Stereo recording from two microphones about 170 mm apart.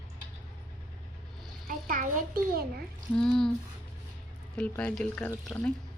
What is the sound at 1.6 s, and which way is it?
A child's voice, 55° right (ahead or behind).